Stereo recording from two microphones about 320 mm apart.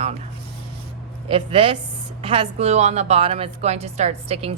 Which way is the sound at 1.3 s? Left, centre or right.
Centre.